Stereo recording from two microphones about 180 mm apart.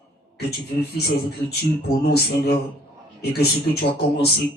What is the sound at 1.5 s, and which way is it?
Speech, 65° left (ahead or behind).